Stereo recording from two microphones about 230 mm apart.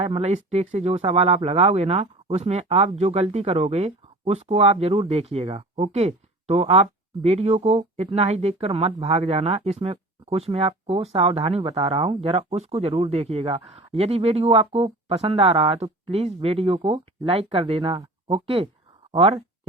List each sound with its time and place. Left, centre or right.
0.0 s speech: right